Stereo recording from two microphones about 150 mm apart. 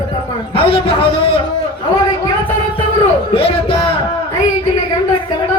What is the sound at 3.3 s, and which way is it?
Speech, 35° left (ahead or behind).